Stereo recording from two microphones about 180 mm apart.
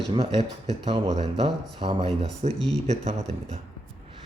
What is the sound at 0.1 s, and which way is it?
Speech, 35° right (ahead or behind).